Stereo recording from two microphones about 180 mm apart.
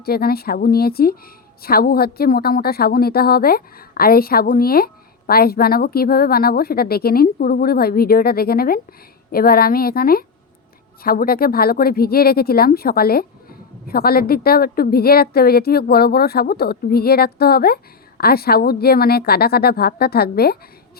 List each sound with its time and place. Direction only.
0.0 s a woman's voice: 60° left (ahead or behind)